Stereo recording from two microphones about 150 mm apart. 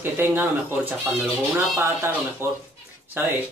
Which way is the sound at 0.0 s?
15° right (ahead or behind).